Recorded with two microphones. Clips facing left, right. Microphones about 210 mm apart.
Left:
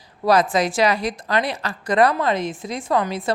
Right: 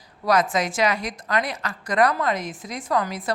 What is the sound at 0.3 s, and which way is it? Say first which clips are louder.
A woman's voice: left 4 dB; 35° left (ahead or behind).